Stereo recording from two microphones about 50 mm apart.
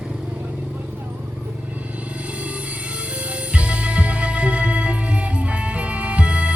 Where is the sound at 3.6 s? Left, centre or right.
Right.